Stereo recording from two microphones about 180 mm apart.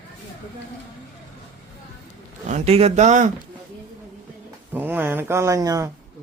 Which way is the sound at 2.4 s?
40° right (ahead or behind).